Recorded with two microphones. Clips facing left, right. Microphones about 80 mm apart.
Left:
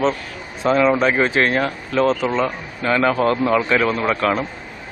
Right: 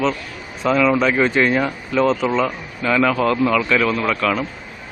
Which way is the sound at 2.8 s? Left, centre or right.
Left.